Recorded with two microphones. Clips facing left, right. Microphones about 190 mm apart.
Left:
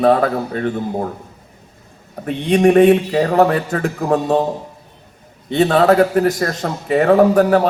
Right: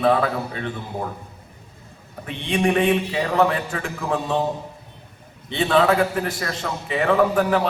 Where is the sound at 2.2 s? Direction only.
45° left (ahead or behind).